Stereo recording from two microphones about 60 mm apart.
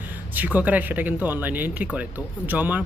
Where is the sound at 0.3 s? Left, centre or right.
Right.